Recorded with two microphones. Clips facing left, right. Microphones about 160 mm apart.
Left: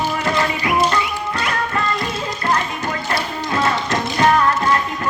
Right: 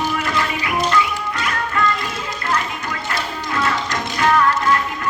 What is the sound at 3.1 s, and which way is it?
Music, 30° left (ahead or behind).